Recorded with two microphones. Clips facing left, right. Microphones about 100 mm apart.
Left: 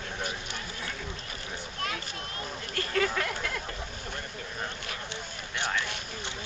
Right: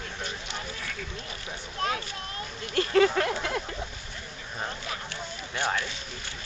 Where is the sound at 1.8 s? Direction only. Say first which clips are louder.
Right 6 dB; 30° right (ahead or behind).